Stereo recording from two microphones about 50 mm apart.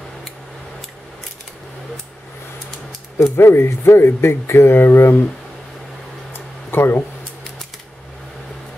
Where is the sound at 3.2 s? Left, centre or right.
Left.